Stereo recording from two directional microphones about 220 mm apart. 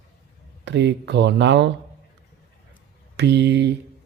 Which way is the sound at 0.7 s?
50° right (ahead or behind).